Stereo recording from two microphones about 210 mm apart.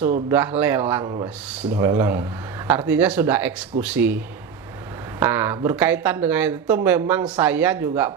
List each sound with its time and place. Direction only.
0.3 s speech: 10° right (ahead or behind)
1.0 s speech: 25° right (ahead or behind)
1.6 s speech: 10° right (ahead or behind)
5.2 s speech: 10° right (ahead or behind)